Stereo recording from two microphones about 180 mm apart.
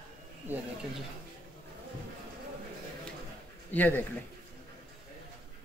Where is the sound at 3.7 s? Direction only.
10° left (ahead or behind).